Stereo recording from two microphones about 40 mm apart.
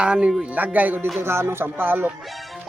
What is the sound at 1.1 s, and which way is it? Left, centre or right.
Speech, right.